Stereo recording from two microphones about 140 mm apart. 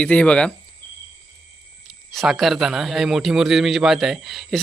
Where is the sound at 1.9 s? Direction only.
Centre (ahead or behind).